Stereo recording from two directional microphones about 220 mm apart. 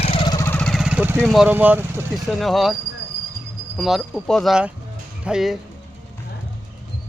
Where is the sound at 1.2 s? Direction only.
Centre (ahead or behind).